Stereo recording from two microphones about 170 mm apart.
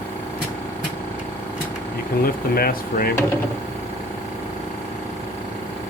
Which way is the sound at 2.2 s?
60° left (ahead or behind).